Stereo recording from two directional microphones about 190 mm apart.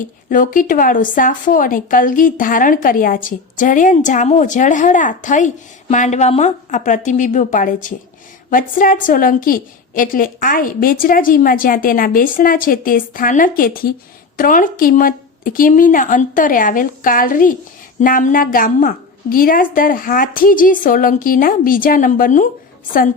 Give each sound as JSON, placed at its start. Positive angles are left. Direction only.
{"t": 0.0, "sound": "a woman's voice", "side_deg": 45}